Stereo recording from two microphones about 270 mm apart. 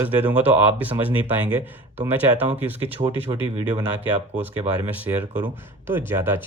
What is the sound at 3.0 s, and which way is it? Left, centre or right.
Speech, right.